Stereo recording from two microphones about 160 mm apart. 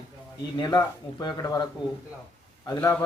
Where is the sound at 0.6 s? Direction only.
25° left (ahead or behind).